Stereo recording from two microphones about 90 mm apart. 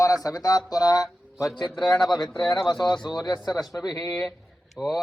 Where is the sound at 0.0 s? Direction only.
40° left (ahead or behind).